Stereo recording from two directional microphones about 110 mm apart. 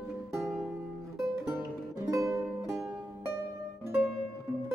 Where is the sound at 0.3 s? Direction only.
25° right (ahead or behind).